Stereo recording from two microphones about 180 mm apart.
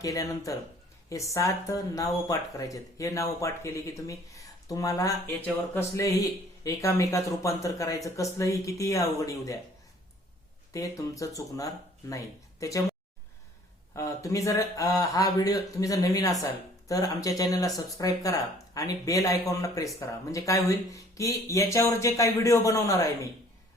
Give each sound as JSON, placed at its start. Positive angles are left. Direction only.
{"t": 0.0, "sound": "a man's voice", "side_deg": 20}
{"t": 10.7, "sound": "speech", "side_deg": 20}
{"t": 13.9, "sound": "a man's voice", "side_deg": 15}